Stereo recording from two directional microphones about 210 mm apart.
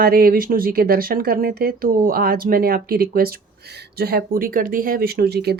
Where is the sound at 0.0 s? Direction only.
45° right (ahead or behind).